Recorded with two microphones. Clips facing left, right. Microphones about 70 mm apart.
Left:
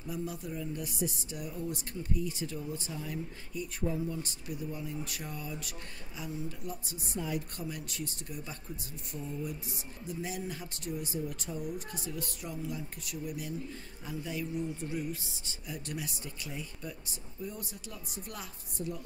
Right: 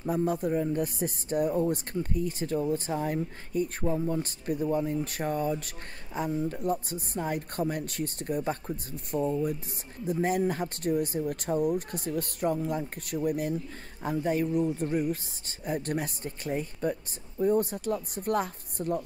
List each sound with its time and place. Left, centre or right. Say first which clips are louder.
0.0 s speech: right 11 dB; right